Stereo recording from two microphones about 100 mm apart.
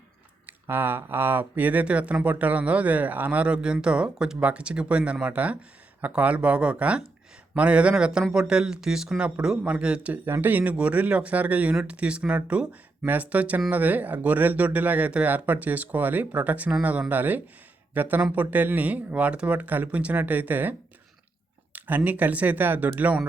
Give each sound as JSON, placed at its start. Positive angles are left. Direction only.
{"t": 0.4, "sound": "speech", "side_deg": -20}